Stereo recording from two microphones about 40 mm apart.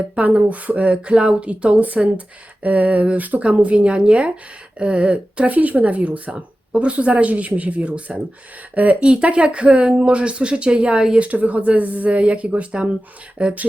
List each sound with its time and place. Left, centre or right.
0.2 s speech: right
1.1 s speech: right
3.5 s speech: right
5.5 s speech: right
11.2 s speech: right